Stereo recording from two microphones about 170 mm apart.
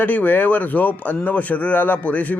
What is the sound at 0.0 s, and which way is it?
Speech, 10° left (ahead or behind).